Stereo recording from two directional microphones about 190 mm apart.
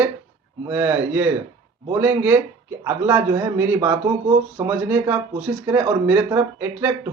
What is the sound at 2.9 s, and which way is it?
Speech, 15° right (ahead or behind).